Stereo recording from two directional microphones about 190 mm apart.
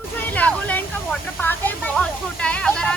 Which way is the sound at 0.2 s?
10° left (ahead or behind).